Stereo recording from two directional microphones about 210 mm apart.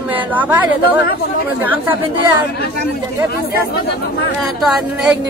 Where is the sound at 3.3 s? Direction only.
50° left (ahead or behind).